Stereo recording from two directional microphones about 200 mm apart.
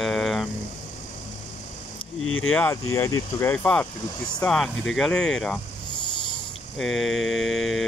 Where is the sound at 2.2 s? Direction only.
90° left.